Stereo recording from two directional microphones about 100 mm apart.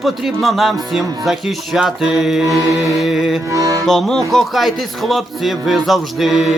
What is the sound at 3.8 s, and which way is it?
Speech, 5° left (ahead or behind).